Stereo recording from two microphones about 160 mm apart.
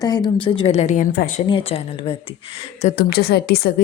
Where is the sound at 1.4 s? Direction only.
35° left (ahead or behind).